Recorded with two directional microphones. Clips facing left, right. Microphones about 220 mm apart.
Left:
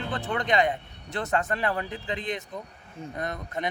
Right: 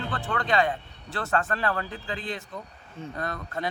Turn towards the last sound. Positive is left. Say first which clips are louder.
# even
turn(degrees=20)  # may be behind; listen again after turning